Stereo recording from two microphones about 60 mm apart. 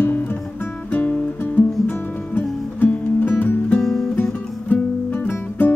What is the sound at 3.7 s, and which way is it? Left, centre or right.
Music, centre.